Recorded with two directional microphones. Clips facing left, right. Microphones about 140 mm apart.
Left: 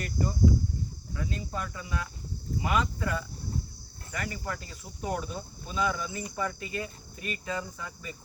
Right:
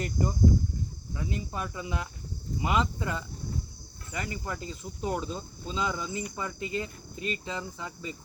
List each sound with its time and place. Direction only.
0.0 s speech: 20° right (ahead or behind)